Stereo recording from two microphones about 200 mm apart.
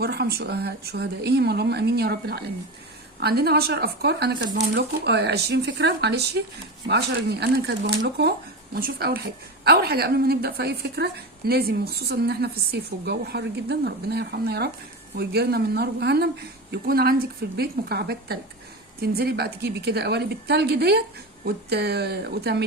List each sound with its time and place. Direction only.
0.0 s a woman's voice: 55° right (ahead or behind)